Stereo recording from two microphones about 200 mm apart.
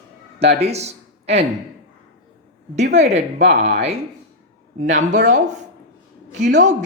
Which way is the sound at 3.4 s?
55° right (ahead or behind).